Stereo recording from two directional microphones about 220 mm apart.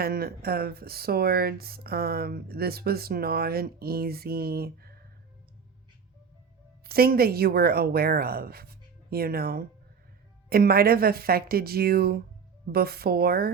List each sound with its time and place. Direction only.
0.0 s speech: 45° right (ahead or behind)
6.8 s speech: 45° right (ahead or behind)